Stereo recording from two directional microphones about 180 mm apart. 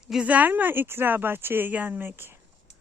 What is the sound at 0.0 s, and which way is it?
Speech, 5° right (ahead or behind).